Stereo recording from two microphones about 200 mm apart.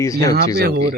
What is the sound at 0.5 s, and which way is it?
Speech, 50° right (ahead or behind).